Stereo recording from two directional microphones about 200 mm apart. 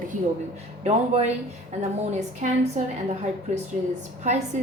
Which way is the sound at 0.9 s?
35° right (ahead or behind).